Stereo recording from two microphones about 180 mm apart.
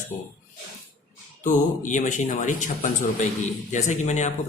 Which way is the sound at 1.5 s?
45° left (ahead or behind).